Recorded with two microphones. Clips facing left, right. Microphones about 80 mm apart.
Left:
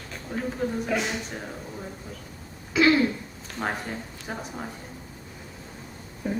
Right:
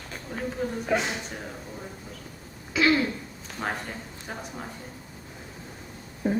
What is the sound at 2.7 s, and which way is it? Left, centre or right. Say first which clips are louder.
Throat clearing: left 2 dB; centre.